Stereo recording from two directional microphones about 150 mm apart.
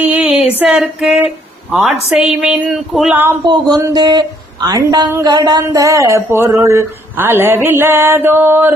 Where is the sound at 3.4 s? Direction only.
30° right (ahead or behind).